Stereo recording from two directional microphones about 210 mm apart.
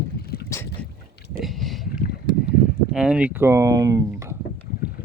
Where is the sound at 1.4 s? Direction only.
Centre (ahead or behind).